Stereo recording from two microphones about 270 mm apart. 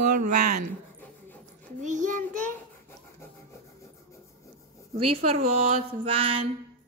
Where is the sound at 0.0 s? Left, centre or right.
Right.